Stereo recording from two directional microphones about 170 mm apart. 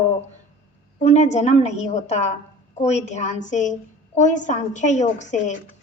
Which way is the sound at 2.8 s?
40° left (ahead or behind).